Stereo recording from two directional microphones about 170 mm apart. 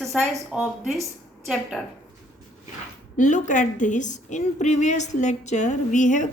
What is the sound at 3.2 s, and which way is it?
A woman's voice, 45° left (ahead or behind).